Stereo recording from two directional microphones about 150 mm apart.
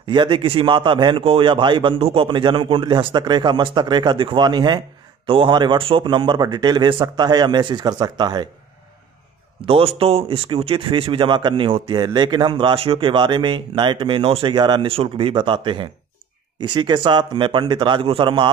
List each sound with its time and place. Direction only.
0.0 s a man's voice: 30° right (ahead or behind)
9.6 s a man's voice: 40° right (ahead or behind)